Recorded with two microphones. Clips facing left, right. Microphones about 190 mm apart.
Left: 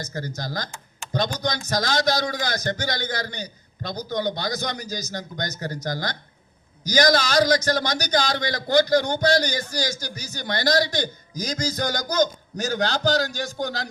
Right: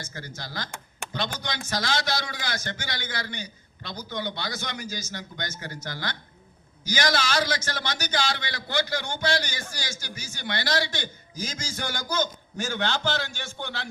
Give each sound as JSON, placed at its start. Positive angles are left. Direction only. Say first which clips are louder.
{"t": 0.0, "sound": "a man's voice", "louder": "left 8 dB", "side_deg": 40}
{"t": 1.0, "sound": "a sound", "louder": "left 6 dB", "side_deg": -65}
{"t": 1.6, "sound": "a man's voice", "louder": "left 5 dB", "side_deg": 40}